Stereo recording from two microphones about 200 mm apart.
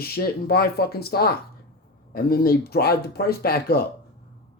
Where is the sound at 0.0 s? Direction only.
50° left (ahead or behind).